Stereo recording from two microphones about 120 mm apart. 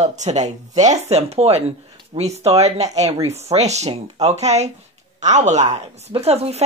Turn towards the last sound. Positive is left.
turn(degrees=-60)  # may be behind; listen again after turning